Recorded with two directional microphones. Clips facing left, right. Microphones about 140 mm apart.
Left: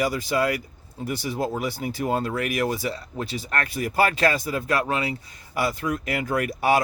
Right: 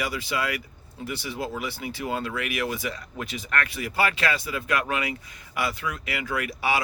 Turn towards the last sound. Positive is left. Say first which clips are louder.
# left 5 dB
turn(degrees=45)  # may be behind; listen again after turning